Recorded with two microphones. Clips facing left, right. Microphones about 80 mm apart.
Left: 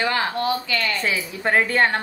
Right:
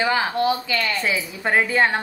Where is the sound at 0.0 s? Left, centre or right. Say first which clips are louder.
Right 2 dB; centre.